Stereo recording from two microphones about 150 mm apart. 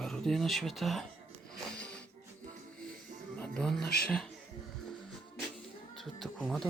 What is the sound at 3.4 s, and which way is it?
Speech, 5° left (ahead or behind).